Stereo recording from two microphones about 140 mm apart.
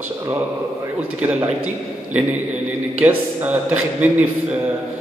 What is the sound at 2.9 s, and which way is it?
A man's voice, 10° right (ahead or behind).